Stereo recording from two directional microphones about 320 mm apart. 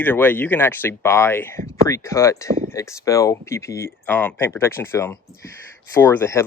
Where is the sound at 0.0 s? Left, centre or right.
Centre.